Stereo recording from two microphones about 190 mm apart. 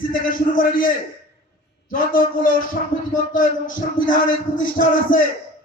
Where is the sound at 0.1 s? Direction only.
45° left (ahead or behind).